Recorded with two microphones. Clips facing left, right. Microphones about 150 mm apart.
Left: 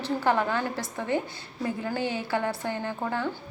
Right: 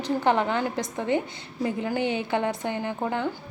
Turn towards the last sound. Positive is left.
turn(degrees=-15)  # may be behind; listen again after turning